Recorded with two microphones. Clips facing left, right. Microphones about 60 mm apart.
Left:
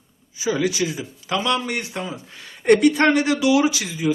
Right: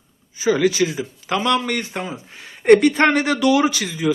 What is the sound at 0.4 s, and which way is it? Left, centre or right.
Speech, right.